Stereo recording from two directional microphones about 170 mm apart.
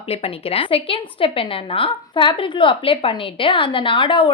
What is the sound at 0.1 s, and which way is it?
A woman's voice, 35° left (ahead or behind).